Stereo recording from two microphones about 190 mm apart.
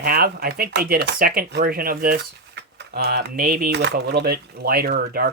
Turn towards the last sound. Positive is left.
turn(degrees=-55)  # may be behind; listen again after turning